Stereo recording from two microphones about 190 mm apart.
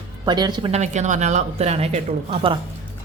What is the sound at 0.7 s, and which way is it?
A woman's voice, 35° right (ahead or behind).